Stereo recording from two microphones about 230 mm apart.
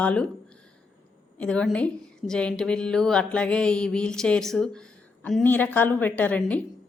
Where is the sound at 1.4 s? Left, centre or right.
Centre.